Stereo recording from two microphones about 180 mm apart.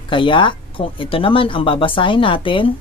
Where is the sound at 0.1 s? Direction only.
25° left (ahead or behind).